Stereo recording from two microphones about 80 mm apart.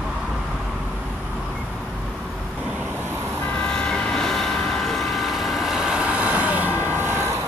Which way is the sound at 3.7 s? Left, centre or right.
Centre.